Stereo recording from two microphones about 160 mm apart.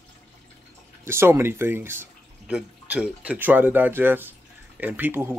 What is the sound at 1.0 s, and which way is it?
Speech, 15° right (ahead or behind).